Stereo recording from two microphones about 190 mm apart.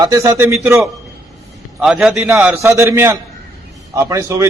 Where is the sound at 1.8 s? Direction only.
Centre (ahead or behind).